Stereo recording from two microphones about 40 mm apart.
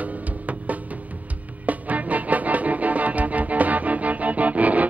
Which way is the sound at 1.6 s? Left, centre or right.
Right.